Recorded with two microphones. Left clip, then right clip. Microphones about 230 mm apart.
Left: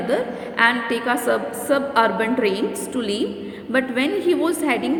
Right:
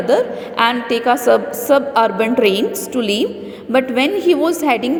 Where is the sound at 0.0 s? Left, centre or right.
Centre.